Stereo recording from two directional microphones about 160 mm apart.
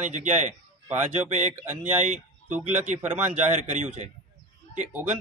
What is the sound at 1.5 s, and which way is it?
Speech, 15° right (ahead or behind).